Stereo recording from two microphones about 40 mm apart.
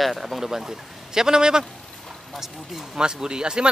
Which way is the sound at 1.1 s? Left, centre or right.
Centre.